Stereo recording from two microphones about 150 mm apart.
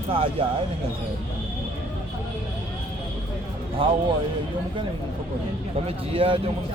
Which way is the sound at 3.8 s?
35° right (ahead or behind).